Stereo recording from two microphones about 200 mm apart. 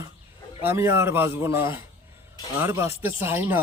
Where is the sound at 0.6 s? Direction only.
10° right (ahead or behind).